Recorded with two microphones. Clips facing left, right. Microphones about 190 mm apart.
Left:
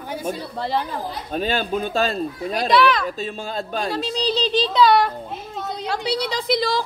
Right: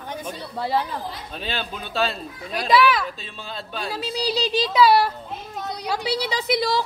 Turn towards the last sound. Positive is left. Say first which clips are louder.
# left 1 dB
turn(degrees=-5)  # may be behind; listen again after turning